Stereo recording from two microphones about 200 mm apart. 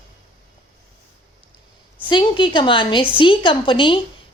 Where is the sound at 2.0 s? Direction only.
25° left (ahead or behind).